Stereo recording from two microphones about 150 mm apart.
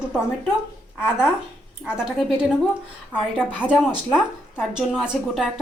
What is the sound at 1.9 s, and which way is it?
Speech, 5° right (ahead or behind).